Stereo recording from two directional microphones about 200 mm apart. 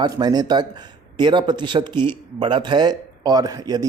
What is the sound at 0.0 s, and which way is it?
Speech, 20° right (ahead or behind).